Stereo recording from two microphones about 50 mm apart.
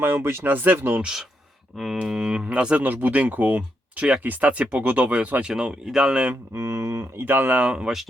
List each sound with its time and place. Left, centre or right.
0.0 s speech: right
0.4 s speech: right
2.0 s speech: centre
2.8 s speech: right
5.4 s speech: centre
6.5 s a sound: right
7.2 s speech: right
7.6 s speech: right